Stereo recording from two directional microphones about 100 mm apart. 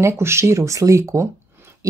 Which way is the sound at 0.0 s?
25° right (ahead or behind).